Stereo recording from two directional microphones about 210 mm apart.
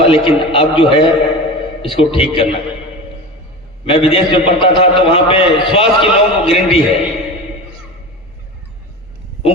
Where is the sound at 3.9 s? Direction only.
25° left (ahead or behind).